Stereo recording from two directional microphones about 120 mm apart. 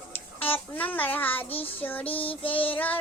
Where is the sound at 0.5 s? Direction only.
15° left (ahead or behind).